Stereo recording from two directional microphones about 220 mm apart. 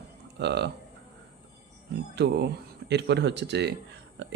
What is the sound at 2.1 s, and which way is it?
Speech, 50° right (ahead or behind).